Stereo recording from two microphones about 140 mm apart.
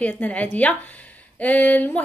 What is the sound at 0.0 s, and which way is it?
A woman's voice, 10° left (ahead or behind).